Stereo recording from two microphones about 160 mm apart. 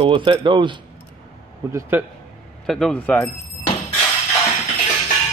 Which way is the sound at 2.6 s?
5° left (ahead or behind).